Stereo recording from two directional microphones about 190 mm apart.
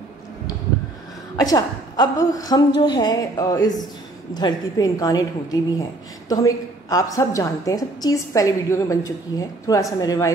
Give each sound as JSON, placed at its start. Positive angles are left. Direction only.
{"t": 1.3, "sound": "a woman's voice", "side_deg": 20}